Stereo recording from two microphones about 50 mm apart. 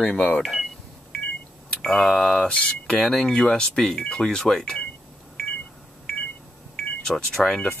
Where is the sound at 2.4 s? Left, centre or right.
Centre.